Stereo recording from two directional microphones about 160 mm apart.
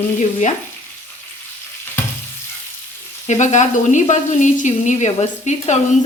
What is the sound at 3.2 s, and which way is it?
A woman's voice, 45° left (ahead or behind).